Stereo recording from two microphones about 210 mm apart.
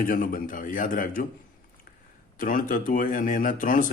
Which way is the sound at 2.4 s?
40° left (ahead or behind).